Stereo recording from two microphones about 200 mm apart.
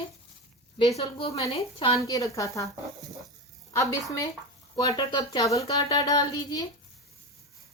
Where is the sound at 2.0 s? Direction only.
15° left (ahead or behind).